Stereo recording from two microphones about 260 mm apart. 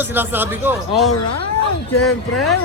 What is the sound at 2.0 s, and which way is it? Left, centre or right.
Speech, left.